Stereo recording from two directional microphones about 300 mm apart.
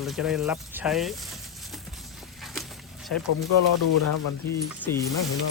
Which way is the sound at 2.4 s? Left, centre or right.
Centre.